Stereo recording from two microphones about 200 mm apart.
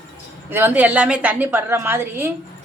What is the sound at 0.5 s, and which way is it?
Speech, 10° right (ahead or behind).